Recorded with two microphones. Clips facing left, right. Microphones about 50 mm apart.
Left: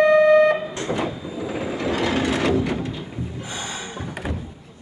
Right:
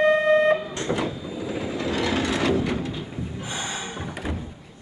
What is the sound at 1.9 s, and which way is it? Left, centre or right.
Wood, centre.